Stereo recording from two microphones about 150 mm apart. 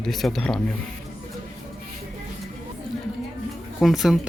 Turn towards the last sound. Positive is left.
turn(degrees=0)  # may be behind; listen again after turning